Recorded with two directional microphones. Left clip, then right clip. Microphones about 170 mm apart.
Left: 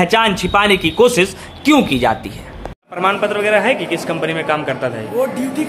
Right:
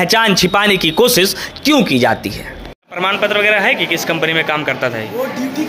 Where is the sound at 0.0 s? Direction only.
25° right (ahead or behind).